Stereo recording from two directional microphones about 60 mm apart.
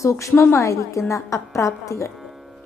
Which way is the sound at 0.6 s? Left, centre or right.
Left.